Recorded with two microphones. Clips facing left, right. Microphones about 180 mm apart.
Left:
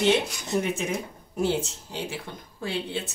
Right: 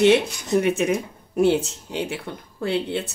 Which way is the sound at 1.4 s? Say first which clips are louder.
Right 7 dB; 65° right (ahead or behind).